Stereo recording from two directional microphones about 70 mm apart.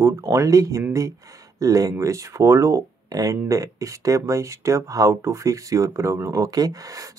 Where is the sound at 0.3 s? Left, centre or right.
Right.